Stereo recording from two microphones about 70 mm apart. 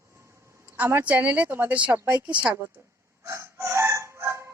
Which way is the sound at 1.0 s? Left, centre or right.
Right.